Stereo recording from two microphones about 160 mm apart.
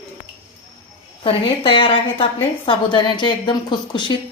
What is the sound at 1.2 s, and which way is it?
A woman's voice, 30° left (ahead or behind).